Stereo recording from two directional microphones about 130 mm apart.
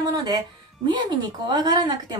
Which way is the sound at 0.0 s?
30° right (ahead or behind).